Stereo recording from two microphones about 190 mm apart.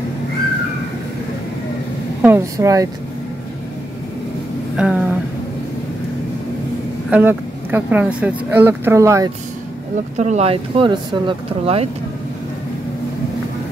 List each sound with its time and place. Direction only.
2.2 s speech: 15° right (ahead or behind)
4.7 s a sound: 5° right (ahead or behind)
7.1 s speech: 10° right (ahead or behind)
10.1 s speech: 35° right (ahead or behind)